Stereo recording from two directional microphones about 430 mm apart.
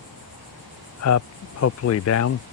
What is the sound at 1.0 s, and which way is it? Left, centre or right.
Cricket, left.